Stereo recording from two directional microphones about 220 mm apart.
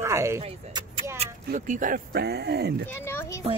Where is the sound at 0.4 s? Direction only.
25° right (ahead or behind).